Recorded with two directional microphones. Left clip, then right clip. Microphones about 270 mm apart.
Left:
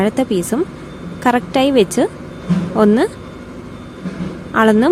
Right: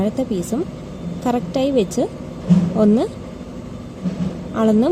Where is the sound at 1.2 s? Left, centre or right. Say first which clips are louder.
Left 6 dB; left.